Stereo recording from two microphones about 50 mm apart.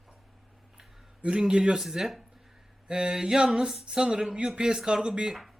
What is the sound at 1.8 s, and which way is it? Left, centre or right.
Speech, centre.